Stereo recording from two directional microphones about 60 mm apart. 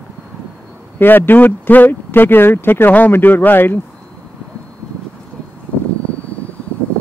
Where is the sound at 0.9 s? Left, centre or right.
Left.